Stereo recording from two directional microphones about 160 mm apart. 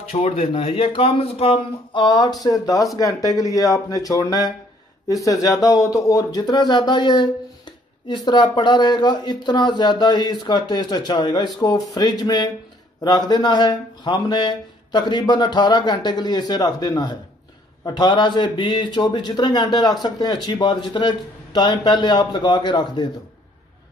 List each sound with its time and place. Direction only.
0.1 s a man's voice: 40° left (ahead or behind)